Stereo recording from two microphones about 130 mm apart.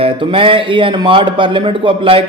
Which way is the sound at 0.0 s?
40° right (ahead or behind).